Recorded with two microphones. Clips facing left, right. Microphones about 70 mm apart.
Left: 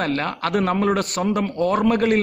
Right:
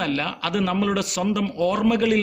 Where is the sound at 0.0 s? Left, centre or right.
Left.